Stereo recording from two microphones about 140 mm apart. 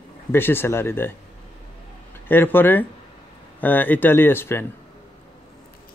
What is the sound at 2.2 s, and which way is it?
Speech, 15° left (ahead or behind).